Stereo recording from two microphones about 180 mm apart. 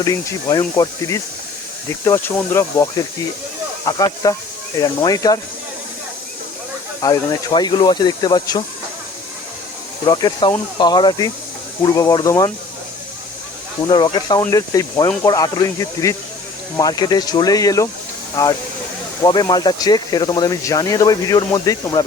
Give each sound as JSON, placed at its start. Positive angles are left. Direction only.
{"t": 0.0, "sound": "speech", "side_deg": 20}
{"t": 7.0, "sound": "speech", "side_deg": 20}
{"t": 10.1, "sound": "speech", "side_deg": 25}
{"t": 13.8, "sound": "speech", "side_deg": 25}